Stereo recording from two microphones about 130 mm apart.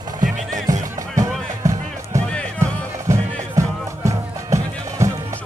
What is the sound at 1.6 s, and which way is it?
Music, 25° right (ahead or behind).